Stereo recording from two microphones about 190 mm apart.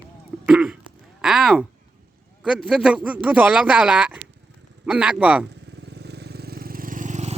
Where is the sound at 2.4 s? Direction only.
5° right (ahead or behind).